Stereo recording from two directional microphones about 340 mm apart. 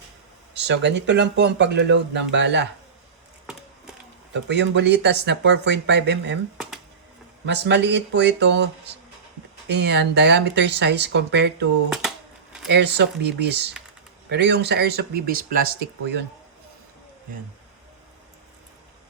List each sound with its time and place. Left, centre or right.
0.5 s speech: right
4.4 s speech: right
7.4 s speech: right
12.6 s speech: right